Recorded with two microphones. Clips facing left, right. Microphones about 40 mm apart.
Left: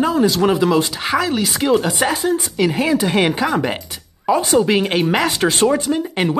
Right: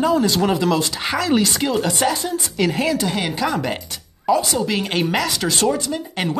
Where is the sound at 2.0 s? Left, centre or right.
Left.